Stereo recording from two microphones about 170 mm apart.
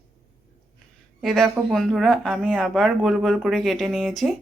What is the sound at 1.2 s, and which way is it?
Speech, centre (ahead or behind).